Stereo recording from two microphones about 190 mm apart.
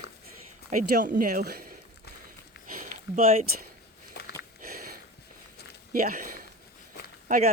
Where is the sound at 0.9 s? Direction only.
45° right (ahead or behind).